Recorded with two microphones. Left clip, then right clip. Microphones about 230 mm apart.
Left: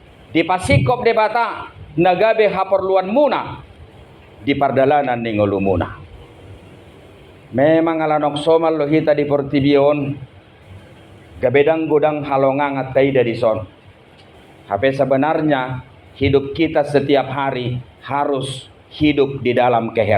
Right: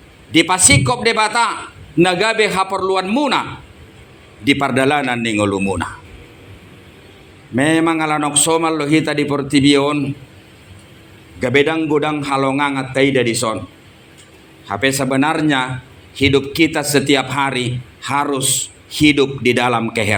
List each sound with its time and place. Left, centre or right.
0.3 s a man's voice: right
4.4 s a man's voice: right
7.5 s a man's voice: right
11.3 s a man's voice: right
14.7 s a man's voice: right